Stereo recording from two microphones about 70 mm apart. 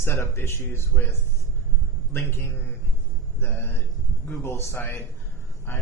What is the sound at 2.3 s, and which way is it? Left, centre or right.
Speech, left.